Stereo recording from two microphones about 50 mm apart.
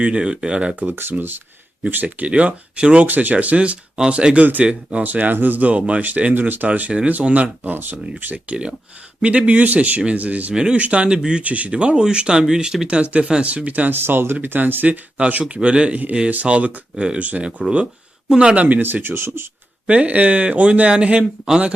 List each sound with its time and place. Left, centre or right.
0.0 s speech: right
0.8 s speech: right
3.1 s speech: right
9.2 s speech: right
10.5 s speech: centre
11.4 s speech: right; by 13.0 s centre
13.0 s speech: right
14.0 s speech: right
16.9 s speech: centre
17.2 s speech: right
17.6 s speech: centre
18.6 s speech: right
19.9 s speech: right